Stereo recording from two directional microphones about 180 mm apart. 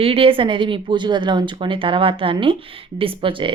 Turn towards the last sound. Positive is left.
turn(degrees=-30)  # may be behind; listen again after turning